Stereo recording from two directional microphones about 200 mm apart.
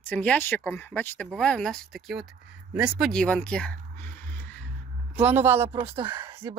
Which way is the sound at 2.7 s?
5° right (ahead or behind).